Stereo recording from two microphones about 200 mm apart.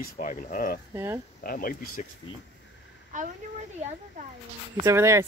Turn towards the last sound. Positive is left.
turn(degrees=-15)  # may be behind; listen again after turning